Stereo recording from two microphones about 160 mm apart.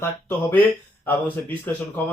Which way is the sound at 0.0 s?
15° left (ahead or behind).